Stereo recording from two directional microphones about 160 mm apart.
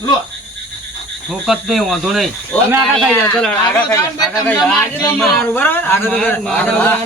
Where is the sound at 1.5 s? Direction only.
Centre (ahead or behind).